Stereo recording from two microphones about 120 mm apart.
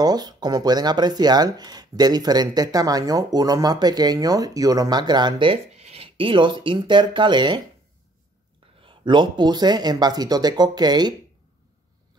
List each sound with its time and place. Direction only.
0.0 s speech: 35° right (ahead or behind)
8.8 s speech: 40° right (ahead or behind)